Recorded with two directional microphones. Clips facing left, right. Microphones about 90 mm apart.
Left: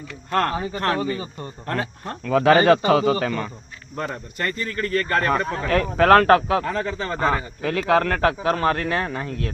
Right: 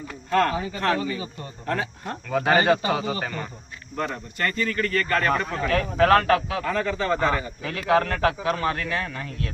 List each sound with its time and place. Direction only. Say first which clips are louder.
0.3 s speech: even; 40° left (ahead or behind)
2.2 s a man's voice: left 5 dB; 80° left; by 3.2 s 55° left (ahead or behind)
3.2 s a man's voice: left 6 dB; 90° left
4.5 s speech: even; 30° left (ahead or behind); by 6.6 s 45° left (ahead or behind)
6.7 s speech: right 1 dB; 30° left (ahead or behind)
7.7 s speech: left 2 dB; 45° left (ahead or behind)